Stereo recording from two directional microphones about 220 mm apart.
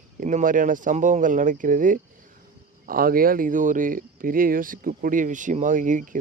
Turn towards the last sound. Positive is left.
turn(degrees=-35)  # may be behind; listen again after turning